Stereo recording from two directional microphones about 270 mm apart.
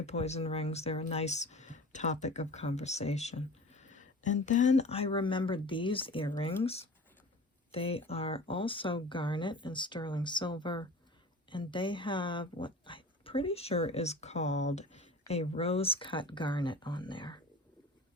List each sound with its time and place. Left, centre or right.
0.0 s speech: left